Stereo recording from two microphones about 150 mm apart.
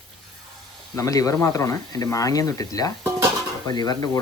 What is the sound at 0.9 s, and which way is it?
Speech, 20° left (ahead or behind).